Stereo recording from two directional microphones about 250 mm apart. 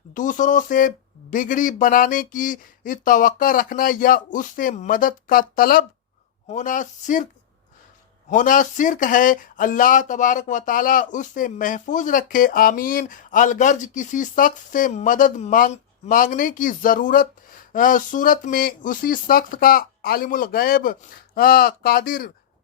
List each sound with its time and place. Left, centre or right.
0.1 s speech: left
8.3 s speech: left